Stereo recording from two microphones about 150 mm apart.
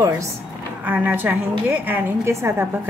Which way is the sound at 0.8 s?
10° right (ahead or behind).